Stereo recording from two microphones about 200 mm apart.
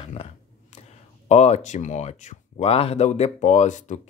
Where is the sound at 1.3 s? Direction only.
35° left (ahead or behind).